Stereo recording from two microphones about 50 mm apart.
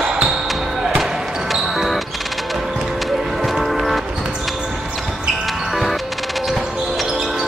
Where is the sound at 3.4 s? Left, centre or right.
Centre.